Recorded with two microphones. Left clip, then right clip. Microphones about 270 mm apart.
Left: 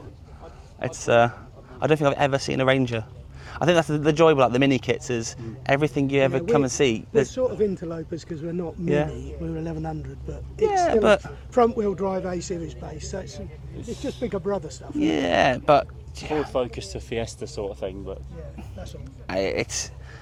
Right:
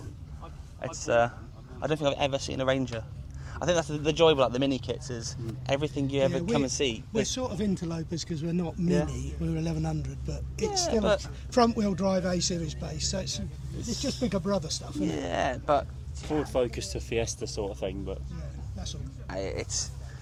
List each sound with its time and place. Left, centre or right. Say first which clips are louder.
0.8 s a man's voice: left 6 dB; left
2.3 s a man's voice: left 7 dB; left
6.4 s speech: left 7 dB; left
6.7 s speech: left 7 dB; left
7.3 s speech: left 10 dB; right
7.8 s speech: left 4 dB; right
9.1 s a man's voice: left 3 dB; right
10.7 s a man's voice: left 8 dB; left
11.5 s speech: left 5 dB; right
14.0 s speech: left 3 dB; right
15.0 s speech: left 10 dB; left
16.4 s speech: left 1 dB; centre
19.3 s speech: left 9 dB; left